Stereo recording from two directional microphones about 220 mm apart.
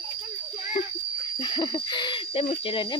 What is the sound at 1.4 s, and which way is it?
Speech, 20° left (ahead or behind).